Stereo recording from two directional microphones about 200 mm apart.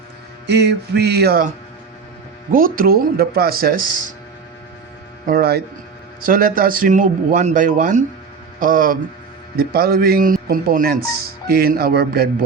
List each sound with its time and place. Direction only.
0.4 s music: 55° right (ahead or behind)
2.5 s a man's voice: 45° right (ahead or behind)
5.2 s a man's voice: 50° right (ahead or behind)